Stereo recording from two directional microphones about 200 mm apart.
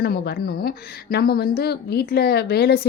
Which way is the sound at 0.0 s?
50° left (ahead or behind).